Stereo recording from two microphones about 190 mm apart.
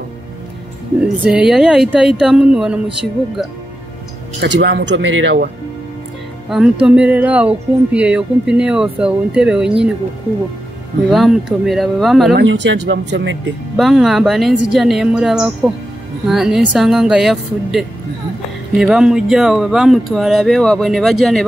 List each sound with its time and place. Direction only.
1.0 s speech: 5° right (ahead or behind)
4.4 s speech: 65° right (ahead or behind); by 5.4 s 80° right
6.5 s speech: 5° right (ahead or behind)
11.1 s speech: centre (ahead or behind)
12.3 s speech: 65° right (ahead or behind)
13.7 s speech: centre (ahead or behind)